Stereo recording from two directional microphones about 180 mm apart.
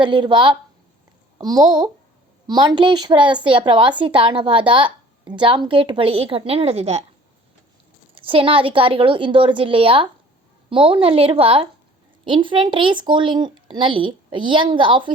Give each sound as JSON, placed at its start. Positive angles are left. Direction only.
{"t": 0.0, "sound": "speech", "side_deg": -25}
{"t": 8.1, "sound": "a woman's voice", "side_deg": -30}